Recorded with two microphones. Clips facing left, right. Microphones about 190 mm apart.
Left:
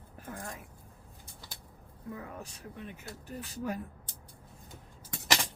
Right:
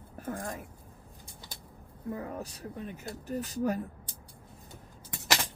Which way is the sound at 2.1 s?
35° right (ahead or behind).